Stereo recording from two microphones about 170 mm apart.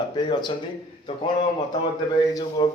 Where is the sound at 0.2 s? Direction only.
25° left (ahead or behind).